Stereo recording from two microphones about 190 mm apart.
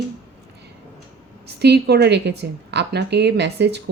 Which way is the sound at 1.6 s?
60° right (ahead or behind).